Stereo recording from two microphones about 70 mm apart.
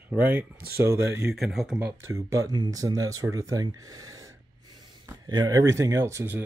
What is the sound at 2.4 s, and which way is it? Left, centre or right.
Speech, right.